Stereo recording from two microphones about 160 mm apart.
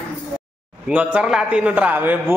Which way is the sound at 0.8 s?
5° right (ahead or behind).